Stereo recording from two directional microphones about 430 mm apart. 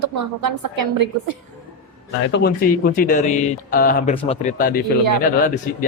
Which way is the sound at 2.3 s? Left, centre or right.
Left.